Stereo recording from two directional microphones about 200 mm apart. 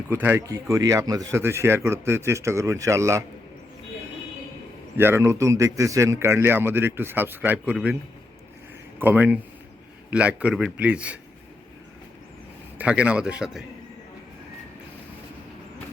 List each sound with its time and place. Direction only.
0.1 s speech: 10° right (ahead or behind)
4.9 s speech: 10° right (ahead or behind)
9.0 s speech: 10° right (ahead or behind)
12.8 s a man's voice: 5° right (ahead or behind)